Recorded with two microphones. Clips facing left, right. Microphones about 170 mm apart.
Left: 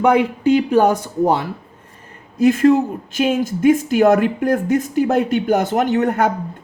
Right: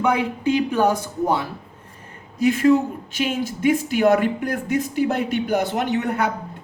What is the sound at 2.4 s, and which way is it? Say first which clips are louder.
Speech: left 4 dB; 45° left (ahead or behind).